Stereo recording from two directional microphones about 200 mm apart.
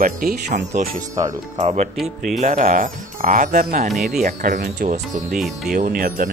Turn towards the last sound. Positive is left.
turn(degrees=-45)  # may be behind; listen again after turning